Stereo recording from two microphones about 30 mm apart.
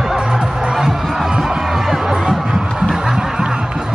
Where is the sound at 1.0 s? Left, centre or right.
Centre.